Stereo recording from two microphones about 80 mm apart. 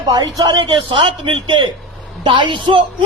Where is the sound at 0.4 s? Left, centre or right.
Right.